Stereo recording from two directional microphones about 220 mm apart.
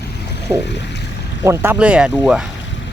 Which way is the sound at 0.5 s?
10° right (ahead or behind).